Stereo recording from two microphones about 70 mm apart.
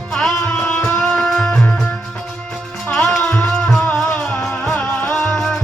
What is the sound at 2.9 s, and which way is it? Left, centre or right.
Music, centre.